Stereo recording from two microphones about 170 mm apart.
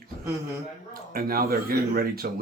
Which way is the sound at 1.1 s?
60° right (ahead or behind).